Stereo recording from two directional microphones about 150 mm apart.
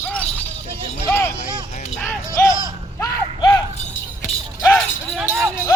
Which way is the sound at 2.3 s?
20° left (ahead or behind).